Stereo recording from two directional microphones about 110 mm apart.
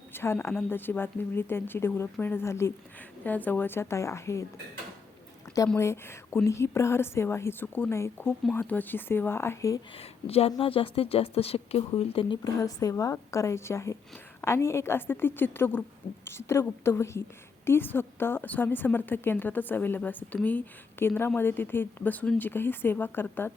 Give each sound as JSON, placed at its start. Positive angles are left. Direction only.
{"t": 0.1, "sound": "a woman's voice", "side_deg": 20}
{"t": 5.7, "sound": "a woman's voice", "side_deg": 25}
{"t": 10.0, "sound": "speech", "side_deg": 65}
{"t": 11.9, "sound": "speech", "side_deg": 50}
{"t": 12.5, "sound": "a woman's voice", "side_deg": 30}